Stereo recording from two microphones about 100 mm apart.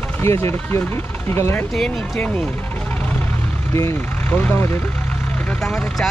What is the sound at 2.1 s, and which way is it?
Speech, 15° left (ahead or behind).